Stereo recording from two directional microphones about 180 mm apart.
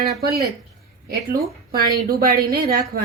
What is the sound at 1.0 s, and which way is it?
A woman's voice, 55° right (ahead or behind).